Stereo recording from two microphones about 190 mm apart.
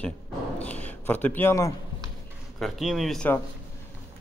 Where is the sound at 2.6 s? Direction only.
Centre (ahead or behind).